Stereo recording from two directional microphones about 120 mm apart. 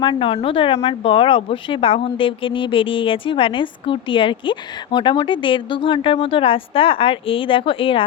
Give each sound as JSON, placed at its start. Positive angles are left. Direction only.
{"t": 0.0, "sound": "speech", "side_deg": 45}